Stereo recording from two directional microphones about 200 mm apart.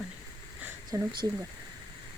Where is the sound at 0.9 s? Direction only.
15° right (ahead or behind).